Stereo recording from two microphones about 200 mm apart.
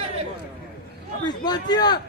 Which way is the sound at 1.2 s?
20° left (ahead or behind).